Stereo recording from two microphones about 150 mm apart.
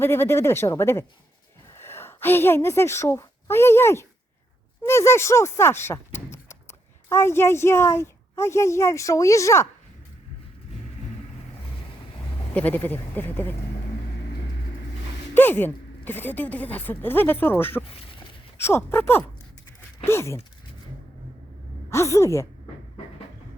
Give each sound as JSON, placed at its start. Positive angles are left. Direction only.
{"t": 0.0, "sound": "a woman's voice", "side_deg": 15}
{"t": 12.5, "sound": "a woman's voice", "side_deg": 10}
{"t": 15.4, "sound": "a woman's voice", "side_deg": 15}
{"t": 21.8, "sound": "a woman's voice", "side_deg": 20}